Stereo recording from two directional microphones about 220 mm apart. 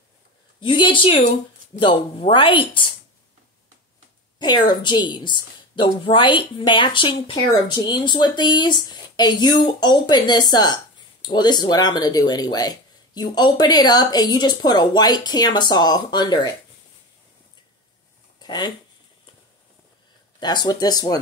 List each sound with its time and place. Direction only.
0.6 s speech: 20° left (ahead or behind)
4.4 s speech: 20° left (ahead or behind)
18.4 s a sound: 20° left (ahead or behind)
20.3 s speech: 20° left (ahead or behind)